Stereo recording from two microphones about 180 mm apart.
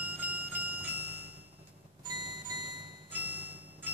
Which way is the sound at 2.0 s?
25° right (ahead or behind).